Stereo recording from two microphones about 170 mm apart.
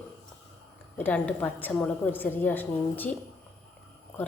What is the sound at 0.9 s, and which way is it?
A woman's voice, 10° left (ahead or behind).